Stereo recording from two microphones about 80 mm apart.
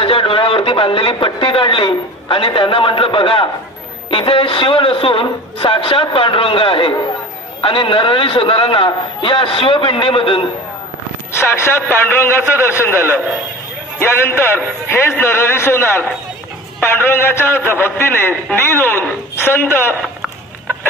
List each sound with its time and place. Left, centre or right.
0.0 s a man's voice: left
11.3 s a man's voice: left